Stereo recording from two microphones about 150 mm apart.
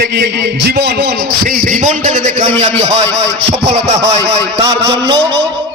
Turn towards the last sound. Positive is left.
turn(degrees=-30)  # may be behind; listen again after turning